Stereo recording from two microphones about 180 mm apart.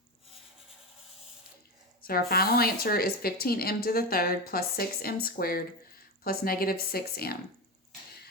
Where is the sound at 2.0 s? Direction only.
55° left (ahead or behind).